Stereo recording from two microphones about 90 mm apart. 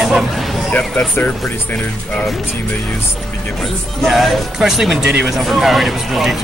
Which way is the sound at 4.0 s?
Centre (ahead or behind).